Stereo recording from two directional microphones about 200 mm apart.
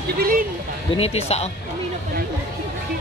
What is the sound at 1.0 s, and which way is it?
Speech, 30° left (ahead or behind).